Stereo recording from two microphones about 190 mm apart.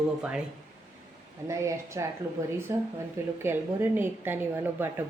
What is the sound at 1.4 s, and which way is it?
A woman's voice, 15° right (ahead or behind).